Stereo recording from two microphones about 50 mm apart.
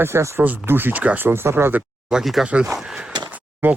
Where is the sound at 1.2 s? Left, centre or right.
Right.